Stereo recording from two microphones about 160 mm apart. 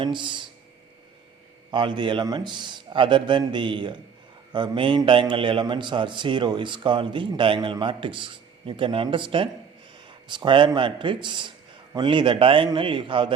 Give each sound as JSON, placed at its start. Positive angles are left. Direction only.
{"t": 0.0, "sound": "a man's voice", "side_deg": -30}
{"t": 1.7, "sound": "a man's voice", "side_deg": -30}